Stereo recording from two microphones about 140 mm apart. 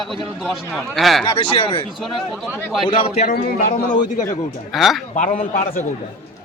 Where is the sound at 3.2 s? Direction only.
90° left.